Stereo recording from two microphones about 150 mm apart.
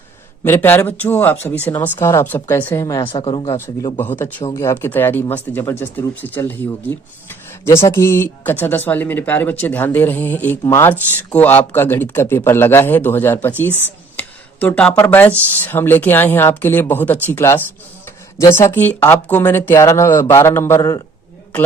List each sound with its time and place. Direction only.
0.4 s speech: 15° left (ahead or behind)
3.0 s speech: 35° left (ahead or behind)
3.9 s speech: 15° left (ahead or behind)